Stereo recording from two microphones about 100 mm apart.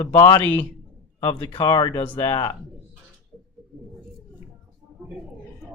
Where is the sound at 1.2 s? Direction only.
60° left (ahead or behind).